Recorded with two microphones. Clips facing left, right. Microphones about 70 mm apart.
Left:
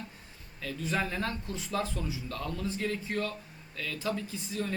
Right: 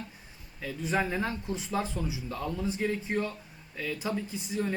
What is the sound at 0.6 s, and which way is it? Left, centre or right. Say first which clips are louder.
Speech: right 2 dB; centre.